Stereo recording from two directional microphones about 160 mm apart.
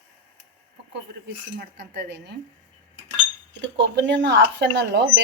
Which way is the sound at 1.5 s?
90° right.